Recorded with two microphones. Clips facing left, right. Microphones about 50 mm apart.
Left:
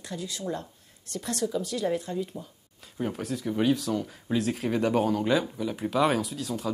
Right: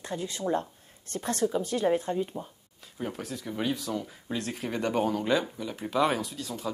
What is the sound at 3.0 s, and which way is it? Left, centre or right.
Speech, centre.